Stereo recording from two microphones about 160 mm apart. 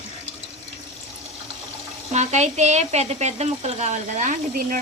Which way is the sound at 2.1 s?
45° right (ahead or behind).